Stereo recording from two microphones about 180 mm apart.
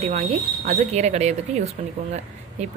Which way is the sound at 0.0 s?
35° right (ahead or behind).